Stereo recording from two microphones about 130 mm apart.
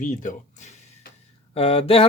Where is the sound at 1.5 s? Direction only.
45° left (ahead or behind).